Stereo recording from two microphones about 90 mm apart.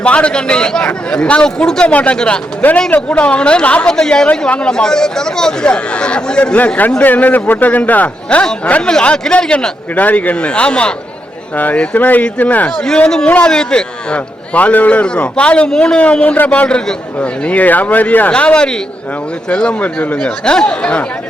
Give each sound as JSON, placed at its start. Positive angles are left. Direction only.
{"t": 0.0, "sound": "a man's voice", "side_deg": 15}
{"t": 12.8, "sound": "a man's voice", "side_deg": 5}